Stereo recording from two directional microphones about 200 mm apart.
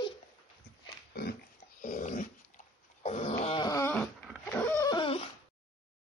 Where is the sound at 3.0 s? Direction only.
35° left (ahead or behind); by 4.0 s 15° left (ahead or behind).